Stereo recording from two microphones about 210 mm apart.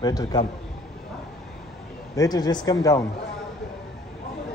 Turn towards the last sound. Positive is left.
turn(degrees=15)  # may be behind; listen again after turning